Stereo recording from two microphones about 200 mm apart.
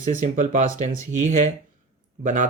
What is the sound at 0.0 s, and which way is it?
Speech, 40° right (ahead or behind).